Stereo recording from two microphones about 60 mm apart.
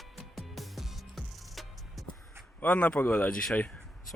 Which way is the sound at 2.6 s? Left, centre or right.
Left.